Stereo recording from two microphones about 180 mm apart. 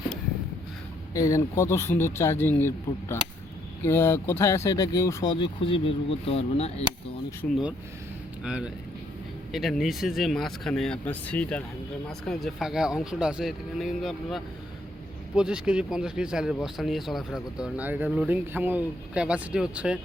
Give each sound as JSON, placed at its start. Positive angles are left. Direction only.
{"t": 1.1, "sound": "speech", "side_deg": 20}
{"t": 7.4, "sound": "speech", "side_deg": 5}
{"t": 8.4, "sound": "speech", "side_deg": -5}